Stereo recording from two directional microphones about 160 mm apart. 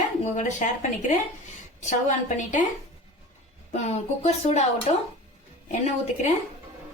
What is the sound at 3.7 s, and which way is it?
A woman's voice, 45° left (ahead or behind).